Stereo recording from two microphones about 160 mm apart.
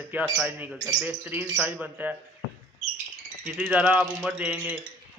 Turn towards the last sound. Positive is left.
turn(degrees=-10)  # may be behind; listen again after turning